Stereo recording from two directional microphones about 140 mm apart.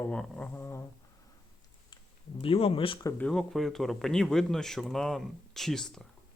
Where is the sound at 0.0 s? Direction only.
10° left (ahead or behind).